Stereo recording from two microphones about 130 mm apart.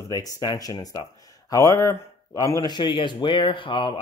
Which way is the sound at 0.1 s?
30° left (ahead or behind).